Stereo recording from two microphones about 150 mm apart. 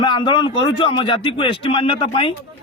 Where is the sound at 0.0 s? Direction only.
30° left (ahead or behind).